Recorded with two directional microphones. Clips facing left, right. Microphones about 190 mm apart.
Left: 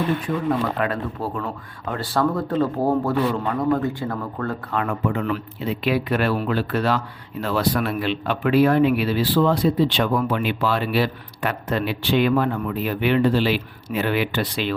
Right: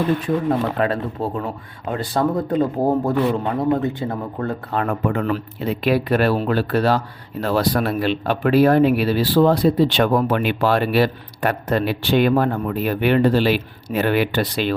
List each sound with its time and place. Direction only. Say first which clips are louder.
0.8 s speech: right 3 dB; 25° right (ahead or behind)
4.7 s speech: right 3 dB; 45° right (ahead or behind)
10.2 s speech: right 4 dB; 65° right (ahead or behind); by 14.8 s 40° right (ahead or behind)